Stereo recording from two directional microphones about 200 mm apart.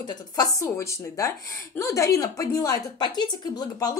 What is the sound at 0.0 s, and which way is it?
A woman's voice, 20° left (ahead or behind).